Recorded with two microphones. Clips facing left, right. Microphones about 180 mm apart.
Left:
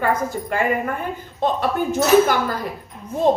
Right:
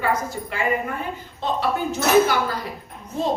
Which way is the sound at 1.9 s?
50° left (ahead or behind).